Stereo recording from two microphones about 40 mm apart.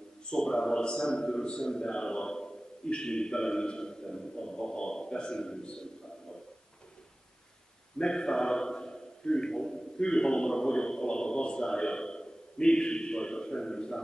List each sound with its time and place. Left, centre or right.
0.3 s a man's voice: centre
8.0 s a man's voice: centre